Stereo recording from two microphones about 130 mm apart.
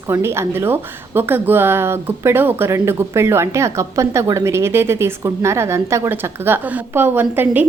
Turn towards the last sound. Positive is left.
turn(degrees=-15)  # may be behind; listen again after turning